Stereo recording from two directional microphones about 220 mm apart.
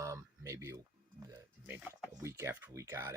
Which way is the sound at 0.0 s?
15° right (ahead or behind).